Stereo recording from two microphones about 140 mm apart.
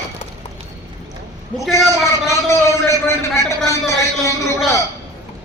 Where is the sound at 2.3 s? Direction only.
20° left (ahead or behind).